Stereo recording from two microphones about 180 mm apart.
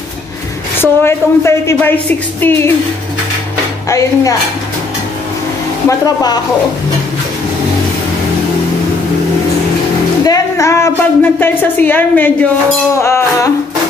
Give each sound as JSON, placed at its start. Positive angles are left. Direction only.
{"t": 0.7, "sound": "a woman's voice", "side_deg": 15}
{"t": 3.9, "sound": "a woman's voice", "side_deg": 20}
{"t": 5.9, "sound": "speech", "side_deg": 20}
{"t": 10.2, "sound": "music", "side_deg": 20}
{"t": 11.3, "sound": "a woman's voice", "side_deg": 10}